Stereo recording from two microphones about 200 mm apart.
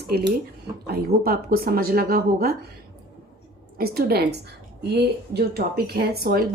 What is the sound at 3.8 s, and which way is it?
Speech, 50° right (ahead or behind).